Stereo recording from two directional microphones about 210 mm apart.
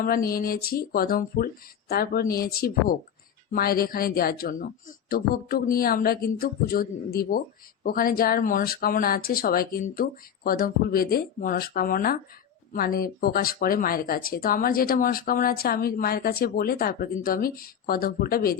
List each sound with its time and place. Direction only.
0.0 s speech: 45° left (ahead or behind)